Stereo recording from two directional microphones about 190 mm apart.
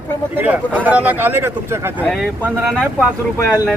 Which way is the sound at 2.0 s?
5° left (ahead or behind).